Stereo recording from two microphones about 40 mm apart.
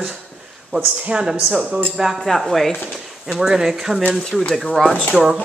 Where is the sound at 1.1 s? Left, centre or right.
Right.